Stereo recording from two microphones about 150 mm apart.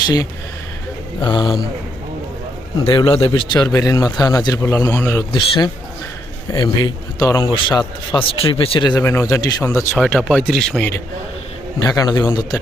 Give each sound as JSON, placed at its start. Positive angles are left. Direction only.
{"t": 1.2, "sound": "a man's voice", "side_deg": 30}
{"t": 2.8, "sound": "a man's voice", "side_deg": 35}
{"t": 5.3, "sound": "a man's voice", "side_deg": 30}
{"t": 9.0, "sound": "a man's voice", "side_deg": 20}
{"t": 10.0, "sound": "speech", "side_deg": 0}
{"t": 11.8, "sound": "a man's voice", "side_deg": 25}